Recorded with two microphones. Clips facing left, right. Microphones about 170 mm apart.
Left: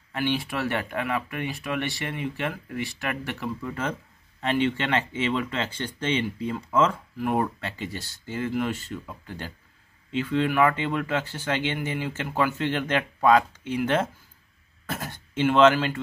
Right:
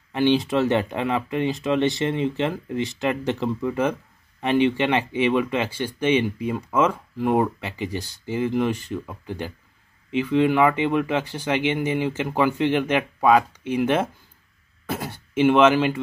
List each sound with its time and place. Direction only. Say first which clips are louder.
0.1 s speech: right 8 dB; 20° right (ahead or behind)